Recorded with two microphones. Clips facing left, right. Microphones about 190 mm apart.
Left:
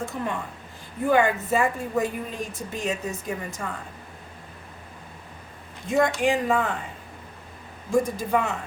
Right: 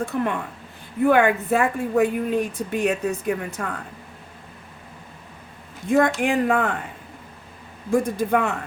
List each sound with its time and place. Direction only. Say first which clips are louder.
0.0 s a woman's voice: right 5 dB; 60° right (ahead or behind)
5.9 s a woman's voice: right 3 dB; 60° right (ahead or behind)
7.9 s a woman's voice: right 3 dB; 55° right (ahead or behind)